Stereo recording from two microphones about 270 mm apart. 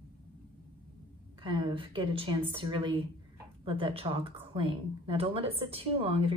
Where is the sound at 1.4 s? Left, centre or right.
Centre.